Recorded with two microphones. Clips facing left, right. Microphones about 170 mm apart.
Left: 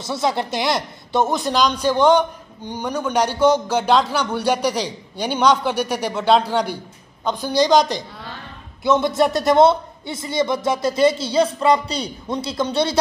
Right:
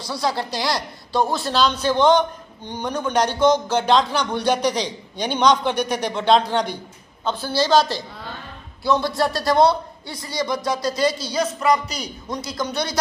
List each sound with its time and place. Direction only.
0.0 s a man's voice: 25° left (ahead or behind)